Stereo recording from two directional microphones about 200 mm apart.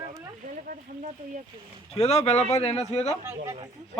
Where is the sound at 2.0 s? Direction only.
30° left (ahead or behind).